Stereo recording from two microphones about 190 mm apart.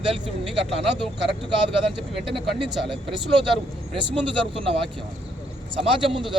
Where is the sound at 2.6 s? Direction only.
25° right (ahead or behind).